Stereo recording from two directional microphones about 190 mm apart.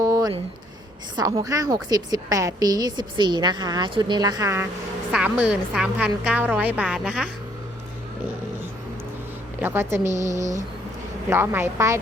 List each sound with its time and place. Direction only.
0.0 s a sound: 20° right (ahead or behind)
1.1 s a woman's voice: 20° right (ahead or behind); by 7.3 s 5° right (ahead or behind)
9.6 s a woman's voice: 10° right (ahead or behind)